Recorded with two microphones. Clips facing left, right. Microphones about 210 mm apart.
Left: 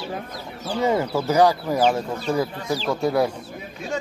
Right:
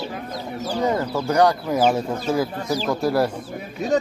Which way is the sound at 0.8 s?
5° left (ahead or behind).